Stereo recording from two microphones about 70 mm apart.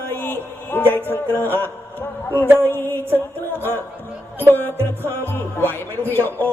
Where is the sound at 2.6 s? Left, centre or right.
Left.